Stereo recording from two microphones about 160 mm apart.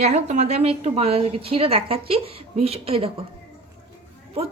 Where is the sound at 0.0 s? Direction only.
45° right (ahead or behind).